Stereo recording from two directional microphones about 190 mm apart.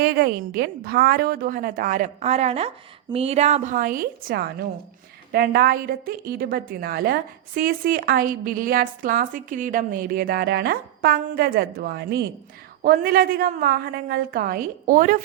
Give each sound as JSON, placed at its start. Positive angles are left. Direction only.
{"t": 0.0, "sound": "a woman's voice", "side_deg": -55}